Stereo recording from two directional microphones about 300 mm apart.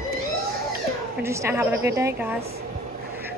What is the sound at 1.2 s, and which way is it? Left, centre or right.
Speech, centre.